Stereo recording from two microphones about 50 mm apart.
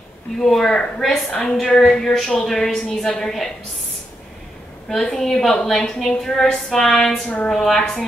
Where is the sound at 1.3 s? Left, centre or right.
Centre.